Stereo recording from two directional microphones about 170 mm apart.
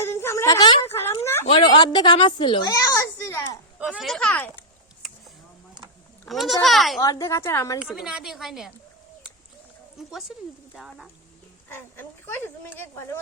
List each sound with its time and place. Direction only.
0.0 s a sound: 15° left (ahead or behind)
1.5 s a child's voice: 30° left (ahead or behind)
3.8 s speech: 5° right (ahead or behind)
6.2 s a woman's voice: centre (ahead or behind)
7.0 s speech: 20° left (ahead or behind)
7.8 s a woman's voice: 5° right (ahead or behind)
10.1 s a woman's voice: centre (ahead or behind)
11.9 s speech: 15° left (ahead or behind)